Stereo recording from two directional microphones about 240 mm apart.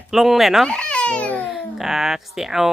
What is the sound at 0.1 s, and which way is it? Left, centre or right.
Speech, centre.